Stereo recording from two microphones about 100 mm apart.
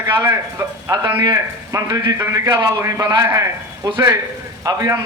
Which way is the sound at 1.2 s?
40° right (ahead or behind).